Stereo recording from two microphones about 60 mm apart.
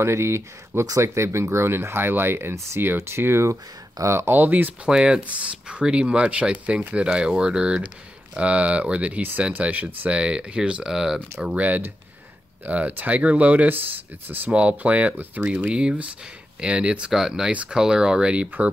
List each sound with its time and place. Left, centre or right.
0.0 s speech: right
4.3 s speech: right
4.8 s speech: centre
11.5 s speech: right
14.5 s speech: centre